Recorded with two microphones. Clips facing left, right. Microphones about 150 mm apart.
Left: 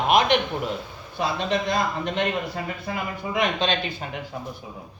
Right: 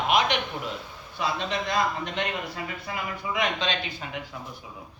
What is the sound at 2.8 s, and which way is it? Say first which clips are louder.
Speech: left 3 dB; 50° left (ahead or behind).